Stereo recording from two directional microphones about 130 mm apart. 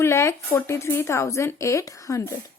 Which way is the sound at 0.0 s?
20° left (ahead or behind).